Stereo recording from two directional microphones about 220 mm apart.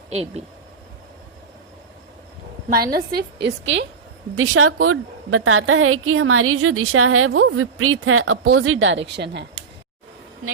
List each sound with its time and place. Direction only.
2.6 s a woman's voice: 45° right (ahead or behind)
4.4 s a woman's voice: 70° right (ahead or behind); by 9.5 s 50° right (ahead or behind)